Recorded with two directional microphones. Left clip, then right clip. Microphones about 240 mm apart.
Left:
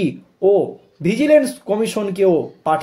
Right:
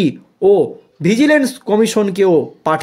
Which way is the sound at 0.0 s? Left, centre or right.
Right.